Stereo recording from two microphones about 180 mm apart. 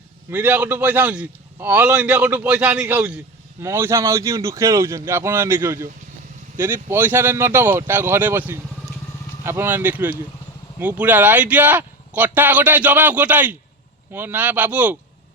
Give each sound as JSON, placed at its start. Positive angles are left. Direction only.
{"t": 0.3, "sound": "a man's voice", "side_deg": -10}